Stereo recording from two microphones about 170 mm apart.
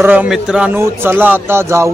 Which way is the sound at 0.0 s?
10° right (ahead or behind).